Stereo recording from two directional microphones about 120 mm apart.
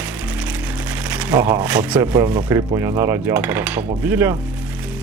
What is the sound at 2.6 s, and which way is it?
Cutlery, 25° right (ahead or behind).